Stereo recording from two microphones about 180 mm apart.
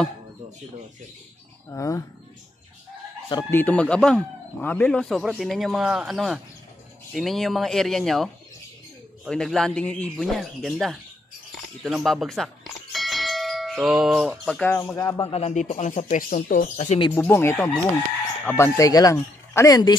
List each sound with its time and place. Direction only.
1.7 s speech: 15° left (ahead or behind)
3.3 s a man's voice: 20° left (ahead or behind); by 11.0 s centre (ahead or behind)
11.8 s bell: centre (ahead or behind)
14.7 s speech: 15° left (ahead or behind)
15.2 s speech: 35° left (ahead or behind)
17.1 s speech: 10° left (ahead or behind)